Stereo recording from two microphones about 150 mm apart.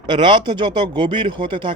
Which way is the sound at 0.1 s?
35° right (ahead or behind).